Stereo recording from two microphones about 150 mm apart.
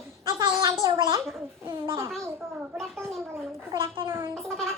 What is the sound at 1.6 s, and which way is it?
Babbling, 15° right (ahead or behind).